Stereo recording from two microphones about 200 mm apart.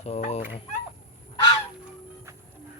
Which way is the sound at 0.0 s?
35° left (ahead or behind).